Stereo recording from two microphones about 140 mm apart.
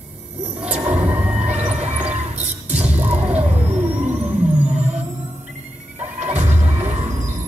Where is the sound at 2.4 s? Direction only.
10° right (ahead or behind).